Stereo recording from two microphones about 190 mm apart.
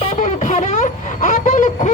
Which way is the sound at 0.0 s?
40° left (ahead or behind).